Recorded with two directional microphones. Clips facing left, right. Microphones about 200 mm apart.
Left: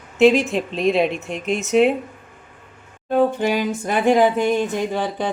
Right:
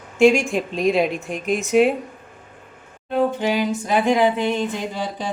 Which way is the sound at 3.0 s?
50° left (ahead or behind).